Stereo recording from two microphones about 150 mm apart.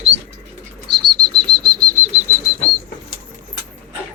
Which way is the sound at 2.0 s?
15° right (ahead or behind).